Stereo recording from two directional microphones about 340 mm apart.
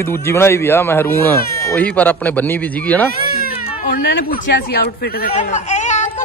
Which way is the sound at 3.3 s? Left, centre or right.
Left.